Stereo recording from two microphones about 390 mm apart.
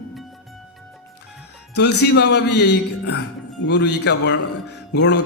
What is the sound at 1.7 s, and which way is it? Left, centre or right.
Music, left.